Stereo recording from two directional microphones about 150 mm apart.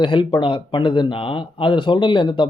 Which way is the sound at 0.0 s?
30° left (ahead or behind).